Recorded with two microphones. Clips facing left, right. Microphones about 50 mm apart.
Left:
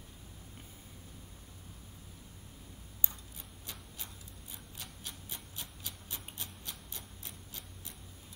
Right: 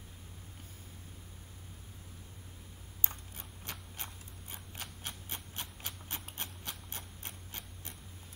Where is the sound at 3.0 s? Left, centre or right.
Right.